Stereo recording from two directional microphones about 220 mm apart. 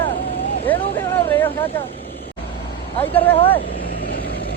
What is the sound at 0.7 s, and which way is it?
Vehicle, 10° left (ahead or behind).